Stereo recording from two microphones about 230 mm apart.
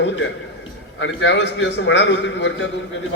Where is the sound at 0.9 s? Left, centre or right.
Left.